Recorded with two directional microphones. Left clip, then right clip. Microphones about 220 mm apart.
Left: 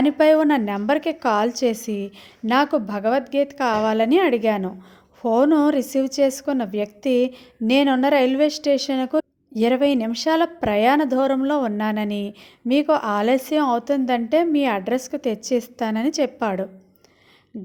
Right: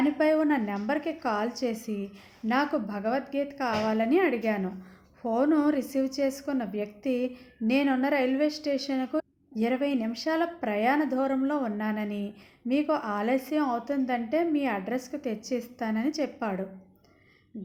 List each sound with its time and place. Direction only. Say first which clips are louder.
0.0 s a woman's voice: left 9 dB; 40° left (ahead or behind)